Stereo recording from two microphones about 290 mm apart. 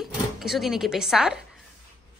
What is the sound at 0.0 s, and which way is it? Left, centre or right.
Speech, centre.